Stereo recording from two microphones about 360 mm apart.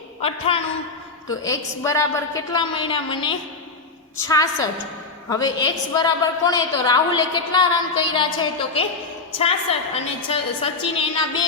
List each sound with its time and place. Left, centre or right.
0.2 s a woman's voice: centre